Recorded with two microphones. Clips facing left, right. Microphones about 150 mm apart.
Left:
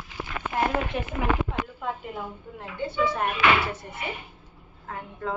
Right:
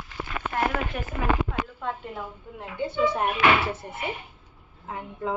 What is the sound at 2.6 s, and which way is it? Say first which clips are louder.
Speech: right 2 dB; 20° right (ahead or behind).